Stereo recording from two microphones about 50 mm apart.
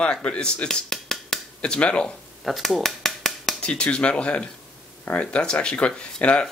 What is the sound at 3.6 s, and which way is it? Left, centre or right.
Speech, left.